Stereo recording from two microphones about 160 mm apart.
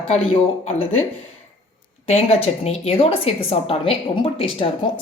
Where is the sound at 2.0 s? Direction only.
40° left (ahead or behind).